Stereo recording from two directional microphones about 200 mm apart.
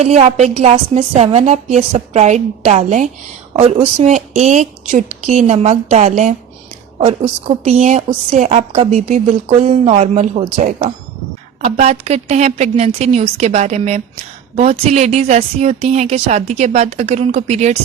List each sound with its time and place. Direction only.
0.0 s a woman's voice: 35° right (ahead or behind)